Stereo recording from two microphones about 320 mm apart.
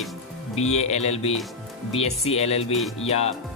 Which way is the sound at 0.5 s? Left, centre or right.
Centre.